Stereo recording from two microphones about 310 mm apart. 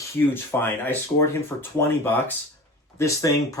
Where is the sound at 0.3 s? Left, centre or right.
Centre.